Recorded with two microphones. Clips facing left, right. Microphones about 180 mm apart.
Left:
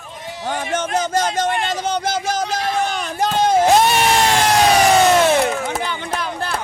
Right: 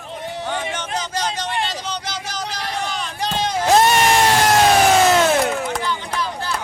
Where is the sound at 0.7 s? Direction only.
45° left (ahead or behind).